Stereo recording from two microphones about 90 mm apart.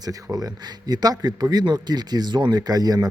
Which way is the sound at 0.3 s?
45° right (ahead or behind).